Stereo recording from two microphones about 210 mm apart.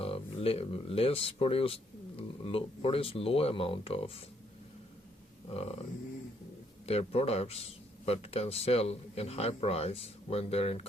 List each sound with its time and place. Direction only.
0.0 s speech: 25° left (ahead or behind)
5.5 s speech: 30° left (ahead or behind)
6.8 s speech: 30° left (ahead or behind)